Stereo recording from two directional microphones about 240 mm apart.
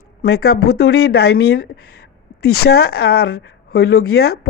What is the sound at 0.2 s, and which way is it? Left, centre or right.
A woman's voice, left.